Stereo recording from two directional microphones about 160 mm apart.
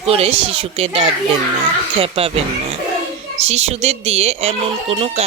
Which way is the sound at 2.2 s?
40° right (ahead or behind).